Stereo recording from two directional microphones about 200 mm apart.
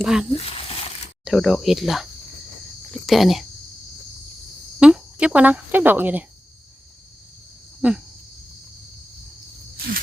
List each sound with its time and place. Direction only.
0.0 s speech: 5° right (ahead or behind)
0.3 s a sound: 30° left (ahead or behind)
1.2 s speech: centre (ahead or behind)
4.8 s speech: 5° right (ahead or behind)
7.8 s cricket: 5° right (ahead or behind)
9.7 s cricket: 50° right (ahead or behind)